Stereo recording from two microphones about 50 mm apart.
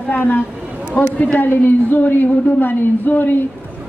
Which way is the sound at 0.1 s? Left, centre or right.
Left.